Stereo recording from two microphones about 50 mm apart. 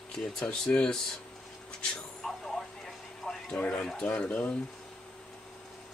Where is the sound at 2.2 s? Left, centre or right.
Centre.